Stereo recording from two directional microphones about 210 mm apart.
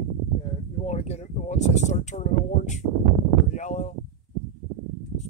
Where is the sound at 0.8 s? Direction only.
30° left (ahead or behind).